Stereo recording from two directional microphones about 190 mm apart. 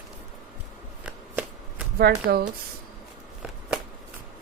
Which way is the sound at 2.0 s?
55° right (ahead or behind).